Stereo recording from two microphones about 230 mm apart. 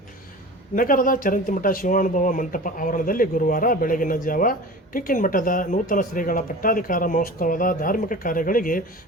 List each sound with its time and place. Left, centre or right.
0.8 s speech: left